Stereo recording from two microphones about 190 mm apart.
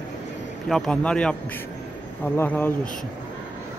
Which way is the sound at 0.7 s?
5° left (ahead or behind).